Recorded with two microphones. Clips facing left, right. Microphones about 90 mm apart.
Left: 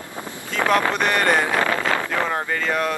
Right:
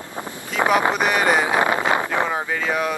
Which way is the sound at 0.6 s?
15° right (ahead or behind).